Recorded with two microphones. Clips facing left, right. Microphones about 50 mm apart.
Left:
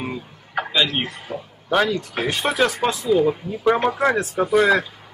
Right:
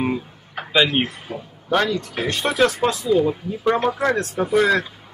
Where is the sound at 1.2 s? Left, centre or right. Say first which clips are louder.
Left 1 dB; centre.